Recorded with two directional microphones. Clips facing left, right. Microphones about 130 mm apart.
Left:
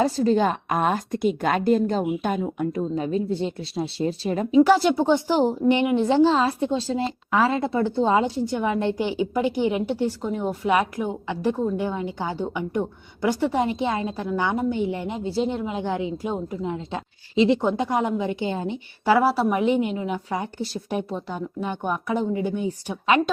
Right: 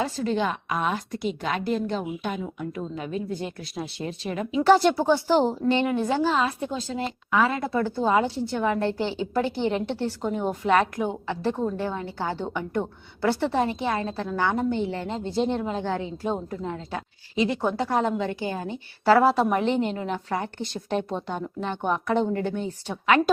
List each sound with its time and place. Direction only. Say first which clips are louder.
0.0 s a woman's voice: left 6 dB; 40° left (ahead or behind)
4.6 s speech: right 2 dB; 5° left (ahead or behind)
4.9 s a woman's voice: left 1 dB; 20° left (ahead or behind)
10.2 s speech: even; centre (ahead or behind)
10.7 s a woman's voice: even; 10° left (ahead or behind)